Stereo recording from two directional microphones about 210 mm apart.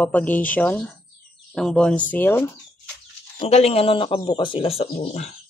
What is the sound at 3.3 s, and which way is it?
Speech, 30° left (ahead or behind).